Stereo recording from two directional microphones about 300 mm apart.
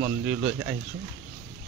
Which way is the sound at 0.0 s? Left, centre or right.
Centre.